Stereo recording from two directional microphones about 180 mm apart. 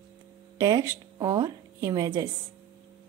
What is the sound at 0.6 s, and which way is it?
A woman's voice, 20° right (ahead or behind).